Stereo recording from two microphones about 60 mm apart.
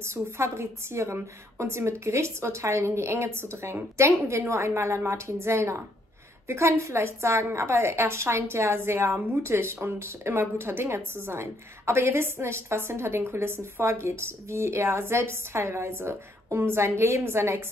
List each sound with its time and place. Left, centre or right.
0.0 s a woman's voice: right